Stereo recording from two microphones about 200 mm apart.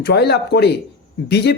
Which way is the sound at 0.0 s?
55° left (ahead or behind).